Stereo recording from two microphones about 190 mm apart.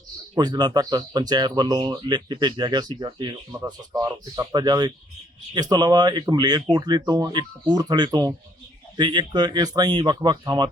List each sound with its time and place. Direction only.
0.3 s speech: 20° right (ahead or behind)